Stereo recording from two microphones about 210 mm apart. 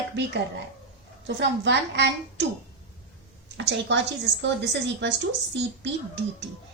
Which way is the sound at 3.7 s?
55° right (ahead or behind).